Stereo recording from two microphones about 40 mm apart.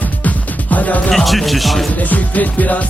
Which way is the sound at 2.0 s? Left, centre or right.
Left.